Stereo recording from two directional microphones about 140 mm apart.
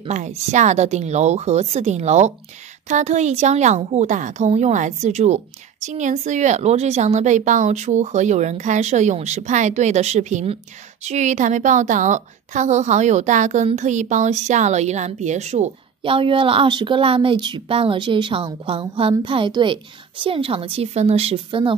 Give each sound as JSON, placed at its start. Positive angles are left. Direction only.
{"t": 0.1, "sound": "a woman's voice", "side_deg": -55}
{"t": 16.0, "sound": "a woman's voice", "side_deg": -40}